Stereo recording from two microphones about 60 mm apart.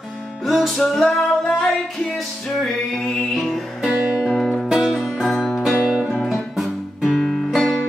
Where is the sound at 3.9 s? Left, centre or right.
Right.